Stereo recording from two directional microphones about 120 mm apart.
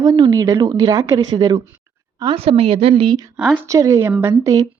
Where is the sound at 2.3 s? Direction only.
55° right (ahead or behind).